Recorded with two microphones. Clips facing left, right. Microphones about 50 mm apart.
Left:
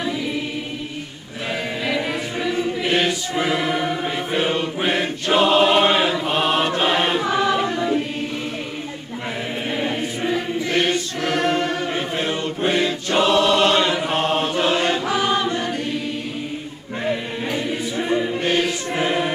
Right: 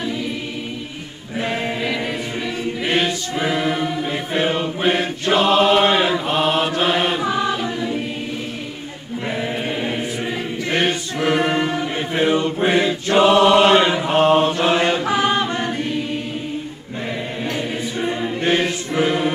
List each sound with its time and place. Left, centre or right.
1.9 s music: centre
3.3 s choir: centre
4.3 s chant: centre
5.3 s choir: centre
6.2 s mantra: centre
6.8 s chant: centre
9.7 s chant: centre
10.7 s choir: right
14.6 s chant: right
18.4 s choir: right
19.0 s choir: centre